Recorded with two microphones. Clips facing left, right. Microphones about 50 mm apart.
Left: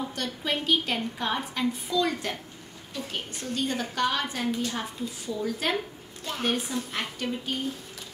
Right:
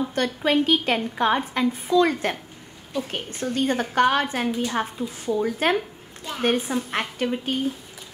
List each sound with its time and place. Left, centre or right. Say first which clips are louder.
0.1 s a woman's voice: right 9 dB; right